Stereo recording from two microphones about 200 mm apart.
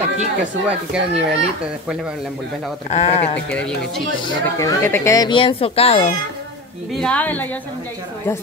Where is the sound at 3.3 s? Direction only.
5° left (ahead or behind).